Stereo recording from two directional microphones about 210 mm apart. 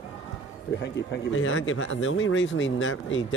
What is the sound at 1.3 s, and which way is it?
Speech, 70° left (ahead or behind).